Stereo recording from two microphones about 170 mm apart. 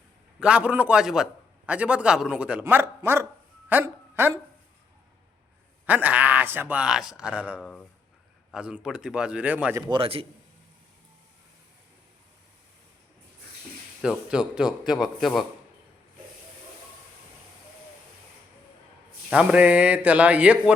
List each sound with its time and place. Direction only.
0.3 s a man's voice: 5° right (ahead or behind)
5.8 s a man's voice: 10° right (ahead or behind)
7.6 s speech: 5° left (ahead or behind)
8.5 s a man's voice: 5° right (ahead or behind)
9.8 s a man's voice: 30° right (ahead or behind)
14.0 s speech: 5° right (ahead or behind)
19.3 s a man's voice: 5° right (ahead or behind)